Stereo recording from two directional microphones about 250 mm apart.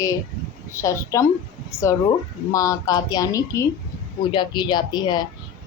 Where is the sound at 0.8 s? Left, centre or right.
Centre.